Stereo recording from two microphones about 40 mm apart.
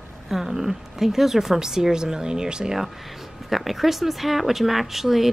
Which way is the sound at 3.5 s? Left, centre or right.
Centre.